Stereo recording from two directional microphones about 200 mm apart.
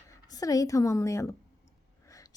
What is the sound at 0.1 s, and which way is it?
A woman's voice, 15° left (ahead or behind).